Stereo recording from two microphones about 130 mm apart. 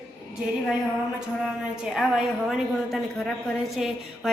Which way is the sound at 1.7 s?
5° right (ahead or behind).